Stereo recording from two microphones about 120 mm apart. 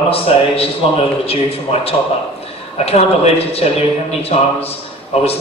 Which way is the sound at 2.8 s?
60° left (ahead or behind).